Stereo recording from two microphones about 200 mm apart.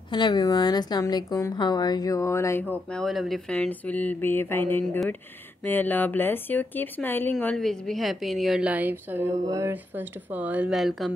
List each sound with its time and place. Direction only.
0.1 s a woman's voice: 20° left (ahead or behind)
2.7 s speech: 5° left (ahead or behind)